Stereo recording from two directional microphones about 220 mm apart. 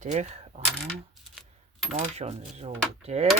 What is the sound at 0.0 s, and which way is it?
Coin, 30° right (ahead or behind).